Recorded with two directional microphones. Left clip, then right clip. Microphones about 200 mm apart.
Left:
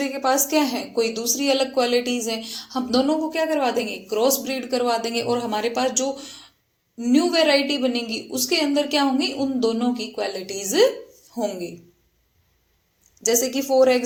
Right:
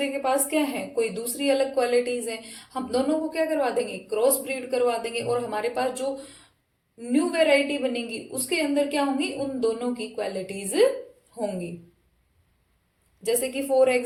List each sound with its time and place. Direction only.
0.1 s a woman's voice: 25° left (ahead or behind)
7.1 s a woman's voice: 30° left (ahead or behind)
13.2 s a woman's voice: 20° left (ahead or behind)